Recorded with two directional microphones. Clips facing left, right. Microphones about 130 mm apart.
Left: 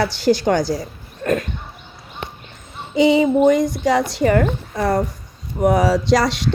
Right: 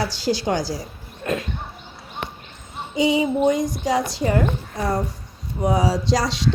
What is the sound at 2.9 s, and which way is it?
Speech, 65° left (ahead or behind).